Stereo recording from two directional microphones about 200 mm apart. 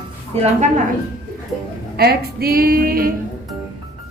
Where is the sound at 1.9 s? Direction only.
50° right (ahead or behind).